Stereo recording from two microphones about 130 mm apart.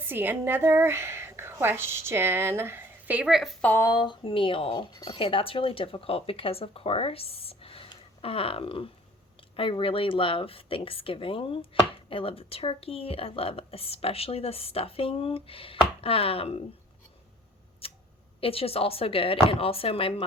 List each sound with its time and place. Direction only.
0.0 s a woman's voice: 15° right (ahead or behind)
3.6 s speech: 15° left (ahead or behind)
3.8 s speech: 35° left (ahead or behind)
17.8 s a sound: 45° left (ahead or behind)
18.3 s speech: 45° left (ahead or behind)